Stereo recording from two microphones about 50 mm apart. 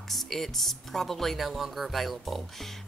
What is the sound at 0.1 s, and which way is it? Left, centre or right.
Speech, centre.